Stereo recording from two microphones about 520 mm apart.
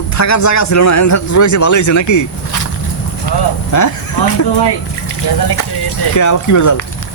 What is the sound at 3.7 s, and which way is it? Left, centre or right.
Speech, left.